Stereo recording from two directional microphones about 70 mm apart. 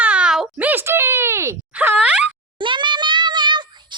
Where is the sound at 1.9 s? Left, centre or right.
Centre.